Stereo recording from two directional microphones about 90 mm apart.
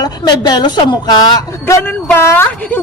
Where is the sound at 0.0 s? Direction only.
50° left (ahead or behind).